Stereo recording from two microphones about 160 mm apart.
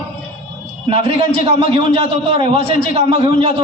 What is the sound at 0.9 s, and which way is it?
A man's voice, 35° right (ahead or behind).